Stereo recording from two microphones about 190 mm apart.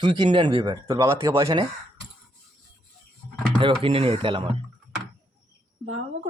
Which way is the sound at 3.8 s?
30° right (ahead or behind).